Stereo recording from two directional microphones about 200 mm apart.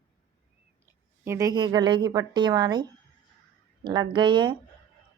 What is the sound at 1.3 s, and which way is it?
Speech, 15° right (ahead or behind).